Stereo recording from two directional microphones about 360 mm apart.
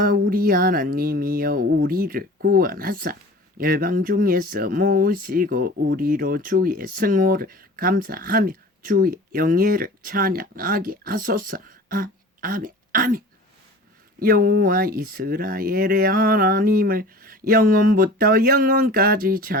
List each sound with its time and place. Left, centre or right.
0.0 s speech: right